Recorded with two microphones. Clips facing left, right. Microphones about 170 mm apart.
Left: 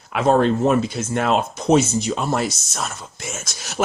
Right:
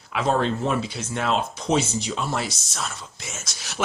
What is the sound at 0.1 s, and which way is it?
Speech, 50° left (ahead or behind).